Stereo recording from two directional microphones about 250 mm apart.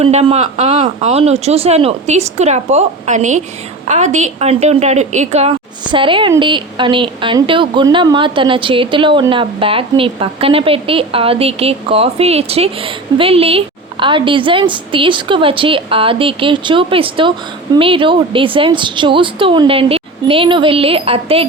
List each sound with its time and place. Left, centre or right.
0.0 s a woman's voice: right